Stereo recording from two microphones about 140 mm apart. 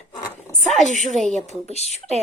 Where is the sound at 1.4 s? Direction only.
50° left (ahead or behind).